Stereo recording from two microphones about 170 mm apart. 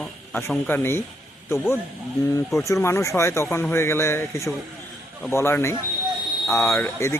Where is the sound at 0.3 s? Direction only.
10° left (ahead or behind).